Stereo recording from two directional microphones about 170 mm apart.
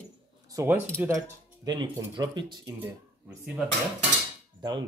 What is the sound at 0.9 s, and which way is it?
Speech, 15° right (ahead or behind).